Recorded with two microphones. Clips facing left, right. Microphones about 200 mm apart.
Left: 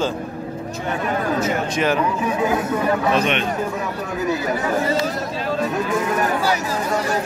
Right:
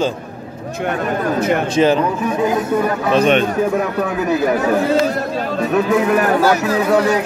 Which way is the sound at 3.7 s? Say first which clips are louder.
Right 7 dB; 65° right (ahead or behind).